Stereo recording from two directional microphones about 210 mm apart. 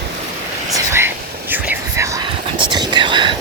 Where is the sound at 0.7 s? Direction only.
10° right (ahead or behind).